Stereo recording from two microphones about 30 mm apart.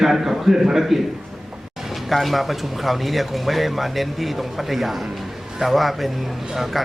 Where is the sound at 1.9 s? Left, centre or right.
Centre.